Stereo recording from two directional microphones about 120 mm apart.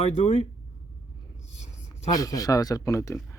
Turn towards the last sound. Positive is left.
turn(degrees=25)  # may be behind; listen again after turning